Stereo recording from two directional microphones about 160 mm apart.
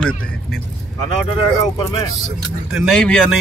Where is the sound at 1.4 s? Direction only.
25° left (ahead or behind).